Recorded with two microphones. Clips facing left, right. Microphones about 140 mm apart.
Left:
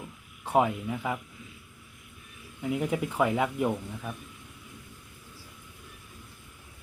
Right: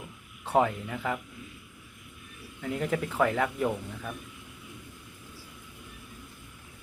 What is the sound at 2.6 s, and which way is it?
Speech, 15° left (ahead or behind).